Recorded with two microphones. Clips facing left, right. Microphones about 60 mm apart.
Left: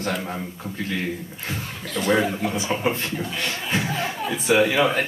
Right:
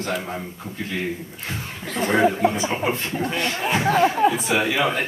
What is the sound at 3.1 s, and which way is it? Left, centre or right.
Speech, right.